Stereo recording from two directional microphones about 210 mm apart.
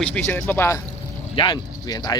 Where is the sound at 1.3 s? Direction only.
20° left (ahead or behind).